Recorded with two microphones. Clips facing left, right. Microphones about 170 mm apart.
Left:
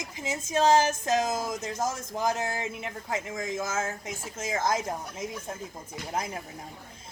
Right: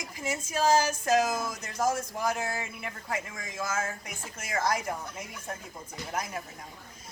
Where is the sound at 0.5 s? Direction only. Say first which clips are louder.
Left 3 dB; 25° left (ahead or behind).